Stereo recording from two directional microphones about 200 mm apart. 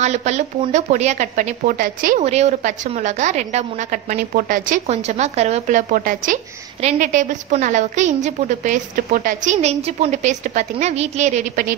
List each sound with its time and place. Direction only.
0.0 s a woman's voice: 35° right (ahead or behind)
2.2 s a woman's voice: 35° right (ahead or behind)